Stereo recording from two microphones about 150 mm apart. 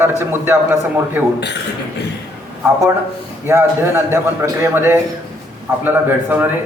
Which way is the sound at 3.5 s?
15° right (ahead or behind).